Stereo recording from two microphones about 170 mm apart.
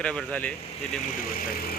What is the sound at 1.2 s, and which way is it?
Speech, 55° left (ahead or behind).